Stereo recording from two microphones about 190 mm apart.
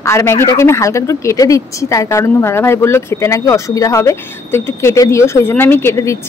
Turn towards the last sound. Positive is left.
turn(degrees=15)  # may be behind; listen again after turning